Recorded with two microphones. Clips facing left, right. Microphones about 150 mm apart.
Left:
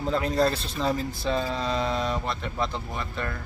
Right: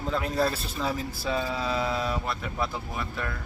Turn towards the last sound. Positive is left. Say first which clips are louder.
# left 1 dB
turn(degrees=-5)  # may be behind; listen again after turning